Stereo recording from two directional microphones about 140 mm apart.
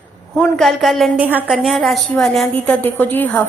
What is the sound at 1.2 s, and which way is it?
Speech, 10° right (ahead or behind).